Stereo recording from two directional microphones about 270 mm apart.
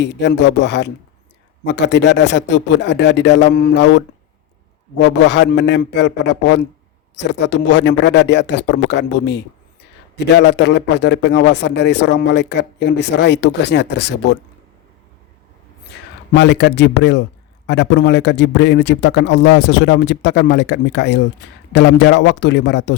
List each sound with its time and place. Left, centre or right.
0.0 s a man's voice: left
16.3 s a man's voice: left